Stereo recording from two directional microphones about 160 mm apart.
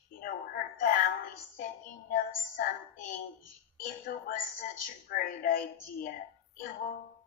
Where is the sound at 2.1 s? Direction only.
60° left (ahead or behind).